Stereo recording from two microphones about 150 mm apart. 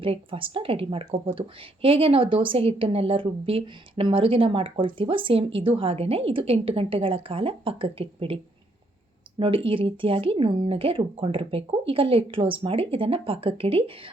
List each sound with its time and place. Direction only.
0.0 s a woman's voice: 35° right (ahead or behind)
9.4 s a woman's voice: 35° right (ahead or behind)